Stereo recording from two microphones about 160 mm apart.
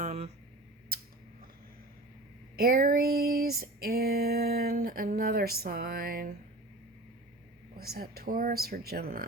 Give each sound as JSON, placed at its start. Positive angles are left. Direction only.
{"t": 0.0, "sound": "a sound", "side_deg": -45}
{"t": 2.6, "sound": "female singing", "side_deg": -65}
{"t": 7.8, "sound": "female singing", "side_deg": -70}